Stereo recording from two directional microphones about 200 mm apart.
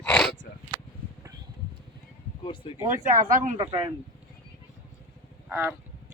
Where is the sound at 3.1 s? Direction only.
40° right (ahead or behind).